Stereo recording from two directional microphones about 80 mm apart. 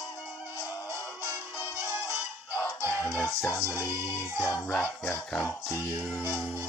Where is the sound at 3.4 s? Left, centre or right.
Left.